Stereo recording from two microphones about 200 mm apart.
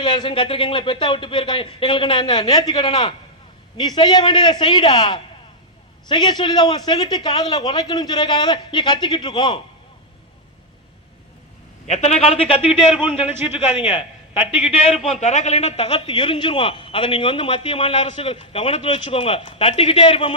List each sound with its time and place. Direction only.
0.0 s a man's voice: 25° left (ahead or behind)
11.9 s a man's voice: 35° left (ahead or behind)
13.1 s a man's voice: 10° right (ahead or behind)
15.1 s a man's voice: 35° left (ahead or behind)